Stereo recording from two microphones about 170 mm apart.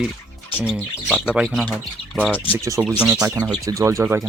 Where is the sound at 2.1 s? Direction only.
10° left (ahead or behind).